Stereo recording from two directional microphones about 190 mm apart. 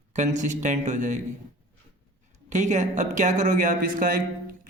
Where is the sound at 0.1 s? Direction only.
40° right (ahead or behind).